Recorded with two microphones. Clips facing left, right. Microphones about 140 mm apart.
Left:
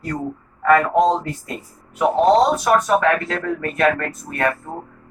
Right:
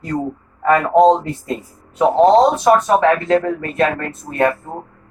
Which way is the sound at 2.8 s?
25° right (ahead or behind).